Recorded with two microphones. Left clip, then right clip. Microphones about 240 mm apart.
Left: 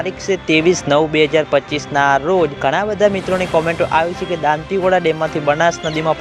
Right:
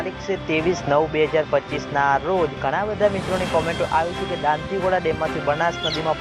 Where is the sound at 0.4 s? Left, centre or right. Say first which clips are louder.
Left 8 dB; left.